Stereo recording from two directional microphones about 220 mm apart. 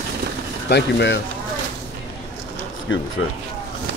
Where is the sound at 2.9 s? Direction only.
60° left (ahead or behind).